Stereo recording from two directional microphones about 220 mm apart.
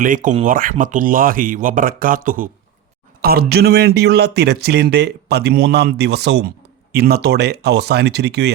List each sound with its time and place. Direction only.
0.0 s speech: 35° right (ahead or behind)